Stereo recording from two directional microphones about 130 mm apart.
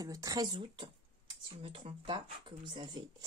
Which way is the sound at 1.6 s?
45° right (ahead or behind).